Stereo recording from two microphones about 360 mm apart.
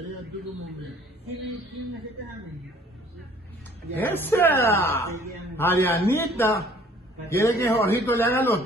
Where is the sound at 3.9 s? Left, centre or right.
Centre.